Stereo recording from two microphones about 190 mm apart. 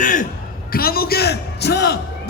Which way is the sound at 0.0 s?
45° left (ahead or behind).